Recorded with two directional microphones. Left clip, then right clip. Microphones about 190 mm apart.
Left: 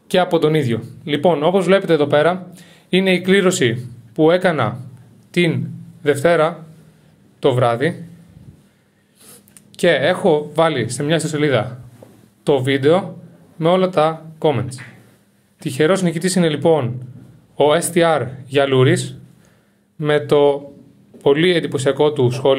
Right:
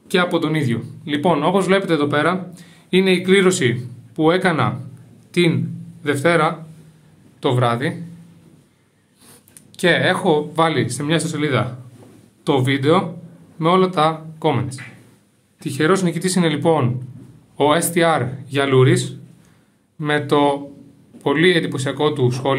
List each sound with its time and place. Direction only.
0.1 s speech: 30° left (ahead or behind)
9.8 s speech: 15° left (ahead or behind)